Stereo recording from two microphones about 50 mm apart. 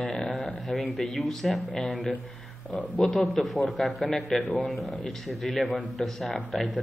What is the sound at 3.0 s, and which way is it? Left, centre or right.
Speech, centre.